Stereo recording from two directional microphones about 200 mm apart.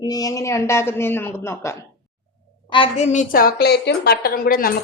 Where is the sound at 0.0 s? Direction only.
20° left (ahead or behind).